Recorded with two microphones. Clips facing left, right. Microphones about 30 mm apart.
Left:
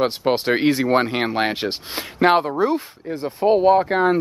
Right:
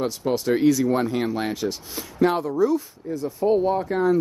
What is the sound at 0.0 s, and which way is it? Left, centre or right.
Speech, left.